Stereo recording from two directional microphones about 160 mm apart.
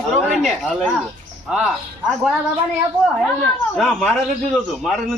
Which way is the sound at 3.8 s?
Centre (ahead or behind).